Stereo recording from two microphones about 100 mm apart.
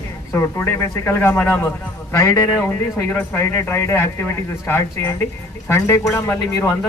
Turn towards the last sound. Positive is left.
turn(degrees=25)  # may be behind; listen again after turning